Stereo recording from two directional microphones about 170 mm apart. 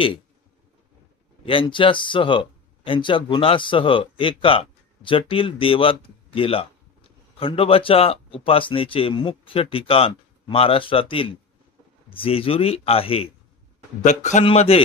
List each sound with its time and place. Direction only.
1.4 s speech: 30° left (ahead or behind)
14.0 s speech: 45° left (ahead or behind)